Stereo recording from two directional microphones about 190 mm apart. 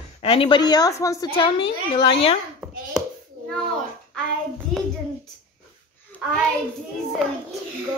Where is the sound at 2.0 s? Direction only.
30° left (ahead or behind).